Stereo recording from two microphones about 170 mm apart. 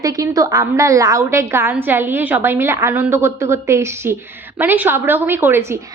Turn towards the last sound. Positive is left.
turn(degrees=-15)  # may be behind; listen again after turning